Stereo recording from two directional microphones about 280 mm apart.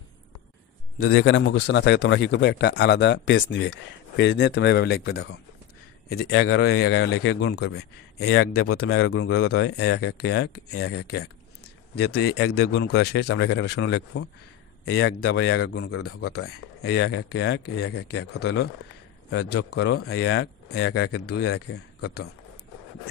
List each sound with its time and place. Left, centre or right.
1.0 s a man's voice: left
8.7 s a man's voice: left
10.1 s a man's voice: left
16.4 s a man's voice: left